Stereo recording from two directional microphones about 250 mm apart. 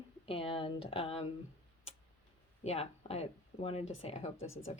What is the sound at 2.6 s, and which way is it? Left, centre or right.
A woman's voice, left.